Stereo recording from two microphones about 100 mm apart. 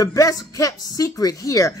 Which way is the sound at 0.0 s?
35° left (ahead or behind).